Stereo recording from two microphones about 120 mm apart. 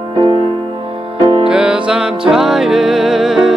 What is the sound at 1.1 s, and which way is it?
Music, 40° right (ahead or behind).